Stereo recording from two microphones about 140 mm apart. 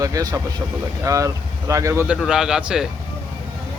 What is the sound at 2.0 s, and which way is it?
Speech, 5° right (ahead or behind).